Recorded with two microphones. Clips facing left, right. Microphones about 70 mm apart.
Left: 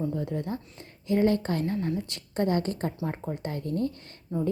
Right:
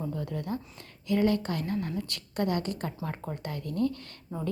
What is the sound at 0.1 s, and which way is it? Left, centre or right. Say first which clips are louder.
A woman's voice: left 3 dB; left.